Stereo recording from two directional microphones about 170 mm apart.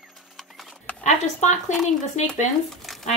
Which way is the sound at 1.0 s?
45° left (ahead or behind).